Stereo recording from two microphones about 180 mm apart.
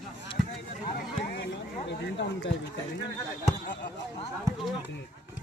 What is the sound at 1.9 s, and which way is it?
Speech, 75° left (ahead or behind).